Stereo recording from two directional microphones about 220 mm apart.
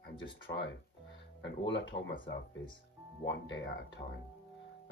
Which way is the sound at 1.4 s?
55° left (ahead or behind).